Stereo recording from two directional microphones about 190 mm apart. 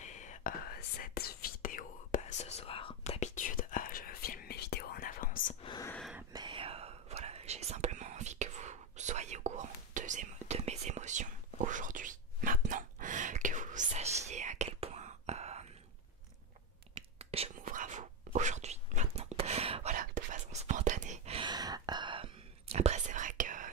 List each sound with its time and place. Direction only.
0.0 s whispering: 40° left (ahead or behind)
5.6 s a sound: 25° left (ahead or behind)
5.9 s a sound: centre (ahead or behind)
6.3 s whispering: 25° right (ahead or behind)
17.2 s whispering: 30° right (ahead or behind)
17.6 s whispering: 45° right (ahead or behind)